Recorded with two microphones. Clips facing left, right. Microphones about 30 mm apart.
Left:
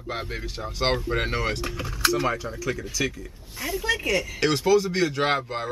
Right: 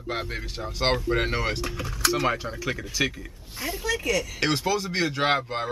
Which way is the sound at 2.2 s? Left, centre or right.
Centre.